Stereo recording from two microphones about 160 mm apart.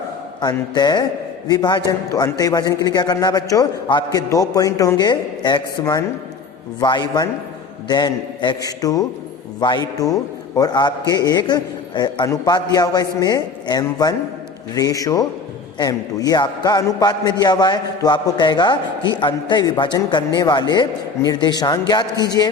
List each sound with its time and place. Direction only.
0.4 s a man's voice: 25° left (ahead or behind)